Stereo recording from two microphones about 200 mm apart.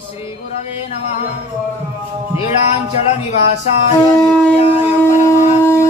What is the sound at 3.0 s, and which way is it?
Speech, 30° left (ahead or behind).